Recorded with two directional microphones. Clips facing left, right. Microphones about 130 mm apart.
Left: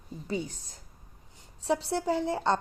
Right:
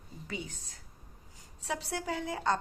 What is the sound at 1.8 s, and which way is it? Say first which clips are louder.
Speech: left 7 dB; 30° left (ahead or behind).